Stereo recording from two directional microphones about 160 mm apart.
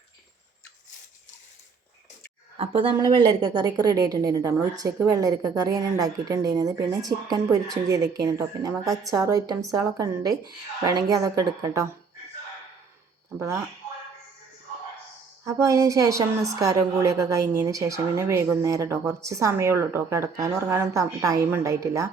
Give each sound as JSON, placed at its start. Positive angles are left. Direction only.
{"t": 2.6, "sound": "a woman's voice", "side_deg": -35}
{"t": 15.4, "sound": "a woman's voice", "side_deg": -20}